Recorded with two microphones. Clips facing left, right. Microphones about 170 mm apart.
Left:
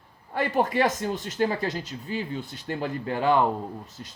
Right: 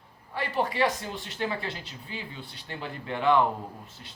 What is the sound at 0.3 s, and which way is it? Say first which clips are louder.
Speech: left 4 dB; 45° left (ahead or behind).